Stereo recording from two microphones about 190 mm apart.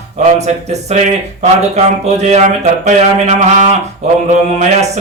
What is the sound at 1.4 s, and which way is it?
Speech, 35° right (ahead or behind).